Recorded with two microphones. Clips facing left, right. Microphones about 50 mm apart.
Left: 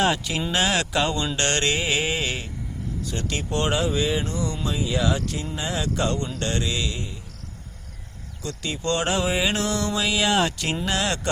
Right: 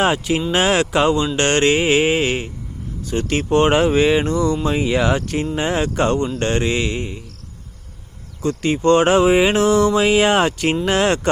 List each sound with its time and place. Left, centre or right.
0.0 s mantra: right
1.1 s speech: centre
1.4 s mantra: right
3.1 s speech: right
3.8 s mantra: right
4.6 s speech: right
6.1 s mantra: right
6.5 s speech: right
8.4 s speech: right
9.6 s mantra: right
10.0 s speech: right